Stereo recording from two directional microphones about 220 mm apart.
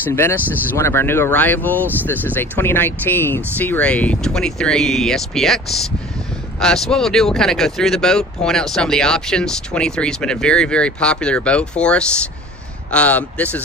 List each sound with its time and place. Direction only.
0.0 s speech: 10° left (ahead or behind)